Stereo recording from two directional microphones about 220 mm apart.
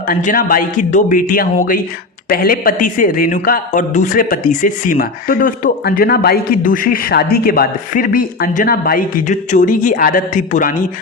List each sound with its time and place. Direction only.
0.1 s speech: 40° left (ahead or behind)